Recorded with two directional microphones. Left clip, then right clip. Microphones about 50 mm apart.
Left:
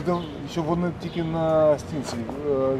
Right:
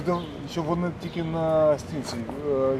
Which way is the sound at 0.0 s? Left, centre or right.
Centre.